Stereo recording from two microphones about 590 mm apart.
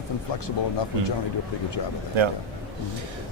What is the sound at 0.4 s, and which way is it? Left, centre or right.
Speech, left.